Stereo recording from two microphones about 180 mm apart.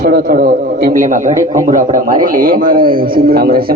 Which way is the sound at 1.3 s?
15° right (ahead or behind).